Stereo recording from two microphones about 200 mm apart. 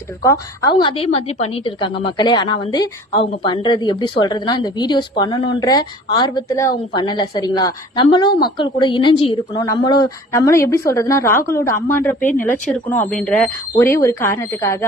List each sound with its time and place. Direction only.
0.2 s a woman's voice: 20° left (ahead or behind)